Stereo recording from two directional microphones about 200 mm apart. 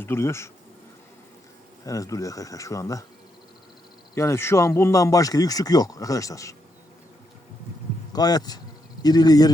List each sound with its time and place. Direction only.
0.0 s speech: 10° left (ahead or behind)
1.8 s speech: 15° left (ahead or behind)
4.1 s speech: 15° left (ahead or behind)
8.1 s speech: 20° left (ahead or behind)